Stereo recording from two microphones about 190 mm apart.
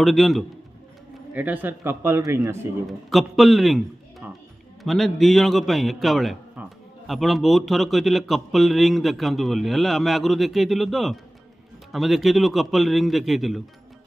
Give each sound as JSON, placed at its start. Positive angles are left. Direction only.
{"t": 0.0, "sound": "a man's voice", "side_deg": 0}
{"t": 2.9, "sound": "a man's voice", "side_deg": 0}